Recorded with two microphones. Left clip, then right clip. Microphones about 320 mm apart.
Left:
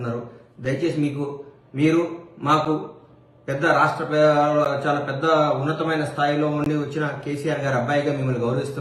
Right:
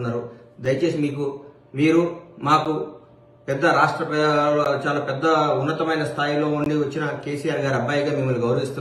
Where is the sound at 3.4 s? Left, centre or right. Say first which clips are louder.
Right 1 dB; centre.